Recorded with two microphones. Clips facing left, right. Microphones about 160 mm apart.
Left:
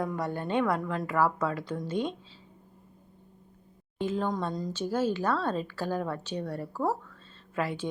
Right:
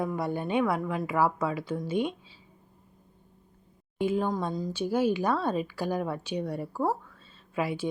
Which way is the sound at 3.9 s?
10° right (ahead or behind).